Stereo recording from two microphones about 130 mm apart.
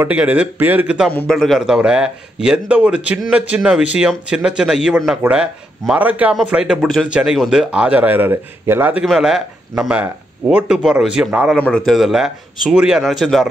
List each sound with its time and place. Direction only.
0.0 s a man's voice: 10° right (ahead or behind)
1.1 s a man's voice: 5° left (ahead or behind); by 9.0 s 15° right (ahead or behind)
9.0 s speech: centre (ahead or behind)
11.5 s speech: 5° left (ahead or behind)